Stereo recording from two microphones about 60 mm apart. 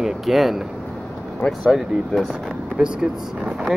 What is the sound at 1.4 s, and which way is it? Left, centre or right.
Speech, left.